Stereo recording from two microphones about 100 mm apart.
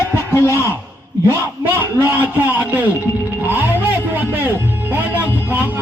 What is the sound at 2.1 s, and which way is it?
Speech, 15° right (ahead or behind).